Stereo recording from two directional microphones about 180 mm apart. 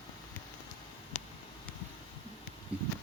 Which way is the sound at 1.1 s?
40° left (ahead or behind).